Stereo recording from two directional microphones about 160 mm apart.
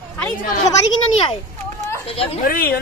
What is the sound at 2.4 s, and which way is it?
Speech, 65° left (ahead or behind).